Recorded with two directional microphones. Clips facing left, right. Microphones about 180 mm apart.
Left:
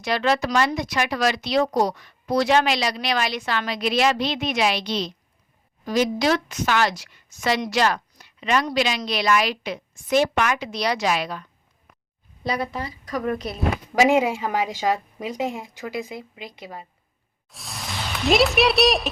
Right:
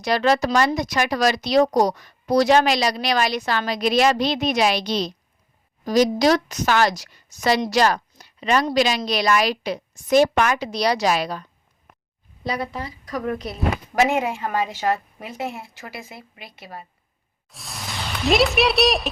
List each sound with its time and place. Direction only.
0.0 s speech: 40° right (ahead or behind)
13.9 s speech: 5° right (ahead or behind)
14.4 s speech: 10° left (ahead or behind)
17.5 s speech: centre (ahead or behind)